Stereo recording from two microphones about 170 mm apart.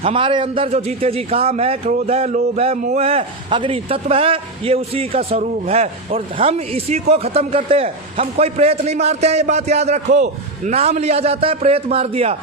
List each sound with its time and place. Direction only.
0.0 s a man's voice: 30° right (ahead or behind)